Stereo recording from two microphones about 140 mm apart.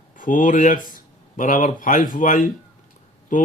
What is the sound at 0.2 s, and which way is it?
Speech, 75° left (ahead or behind).